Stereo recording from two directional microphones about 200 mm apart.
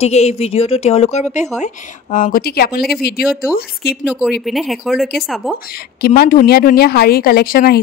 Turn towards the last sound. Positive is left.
turn(degrees=50)  # may be behind; listen again after turning